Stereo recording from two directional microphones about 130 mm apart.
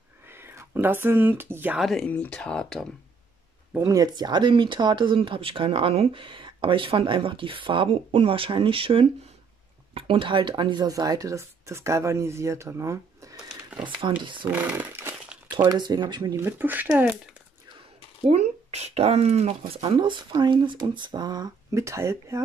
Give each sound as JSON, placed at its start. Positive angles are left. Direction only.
{"t": 0.2, "sound": "speech", "side_deg": -15}
{"t": 1.8, "sound": "speech", "side_deg": 5}
{"t": 3.8, "sound": "speech", "side_deg": -30}
{"t": 13.8, "sound": "speech", "side_deg": -40}
{"t": 14.5, "sound": "chainsaw", "side_deg": -15}
{"t": 15.7, "sound": "speech", "side_deg": -30}
{"t": 16.3, "sound": "speech", "side_deg": -15}
{"t": 18.2, "sound": "speech", "side_deg": -55}
{"t": 19.6, "sound": "speech", "side_deg": -40}